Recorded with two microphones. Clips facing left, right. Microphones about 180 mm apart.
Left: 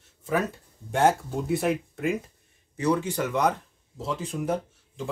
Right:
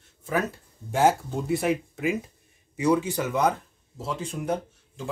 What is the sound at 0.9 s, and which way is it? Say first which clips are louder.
Speech: even; centre (ahead or behind).